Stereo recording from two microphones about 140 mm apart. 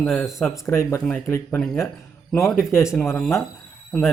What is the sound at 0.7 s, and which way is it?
Speech, 20° left (ahead or behind).